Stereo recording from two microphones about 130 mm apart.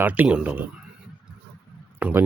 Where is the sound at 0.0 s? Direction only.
10° right (ahead or behind).